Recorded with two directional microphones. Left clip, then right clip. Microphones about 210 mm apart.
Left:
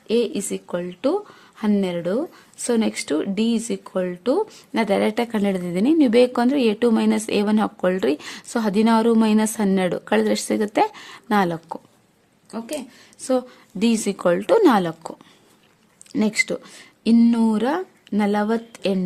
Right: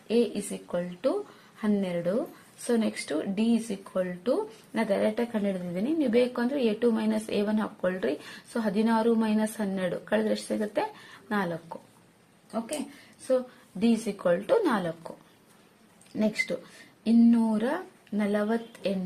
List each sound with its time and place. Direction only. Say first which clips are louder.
0.1 s speech: left 6 dB; 55° left (ahead or behind)
13.2 s speech: left 5 dB; 50° left (ahead or behind)
16.1 s speech: left 7 dB; 50° left (ahead or behind)